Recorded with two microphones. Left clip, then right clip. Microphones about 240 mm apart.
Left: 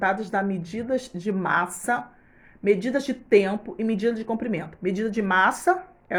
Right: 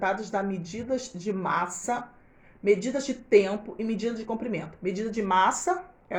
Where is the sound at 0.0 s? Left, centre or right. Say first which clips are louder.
Left 4 dB; left.